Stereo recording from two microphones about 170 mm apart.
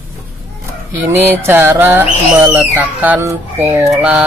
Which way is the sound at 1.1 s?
15° right (ahead or behind).